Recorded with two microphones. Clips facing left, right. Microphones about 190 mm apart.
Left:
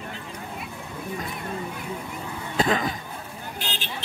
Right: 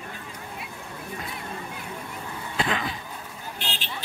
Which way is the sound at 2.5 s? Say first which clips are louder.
Left 5 dB; 40° left (ahead or behind).